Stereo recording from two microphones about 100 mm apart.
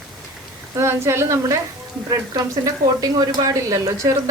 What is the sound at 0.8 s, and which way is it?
Speech, 25° right (ahead or behind).